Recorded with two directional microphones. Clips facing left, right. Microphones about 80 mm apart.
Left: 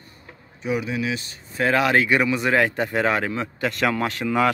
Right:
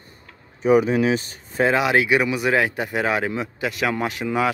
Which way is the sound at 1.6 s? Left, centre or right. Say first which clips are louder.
Right 1 dB; centre.